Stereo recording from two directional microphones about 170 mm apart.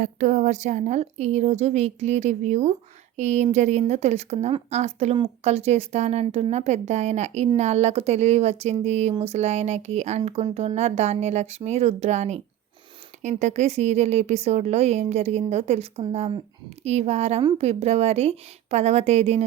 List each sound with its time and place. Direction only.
0.0 s a woman's voice: 50° right (ahead or behind)